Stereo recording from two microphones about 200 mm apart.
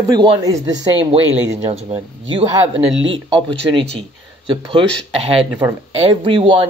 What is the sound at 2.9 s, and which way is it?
Speech, 70° right (ahead or behind).